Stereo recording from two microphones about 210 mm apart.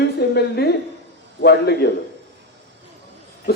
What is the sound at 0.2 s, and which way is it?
A woman's voice, 50° left (ahead or behind).